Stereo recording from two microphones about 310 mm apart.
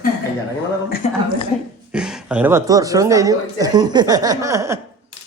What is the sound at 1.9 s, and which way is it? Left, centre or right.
A woman's voice, centre.